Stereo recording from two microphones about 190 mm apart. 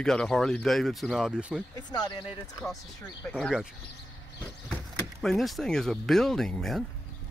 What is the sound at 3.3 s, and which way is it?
Speech, centre (ahead or behind).